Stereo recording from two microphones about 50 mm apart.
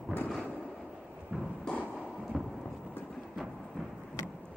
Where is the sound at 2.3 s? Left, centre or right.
Centre.